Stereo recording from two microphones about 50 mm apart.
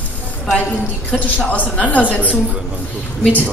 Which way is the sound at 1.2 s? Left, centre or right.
Left.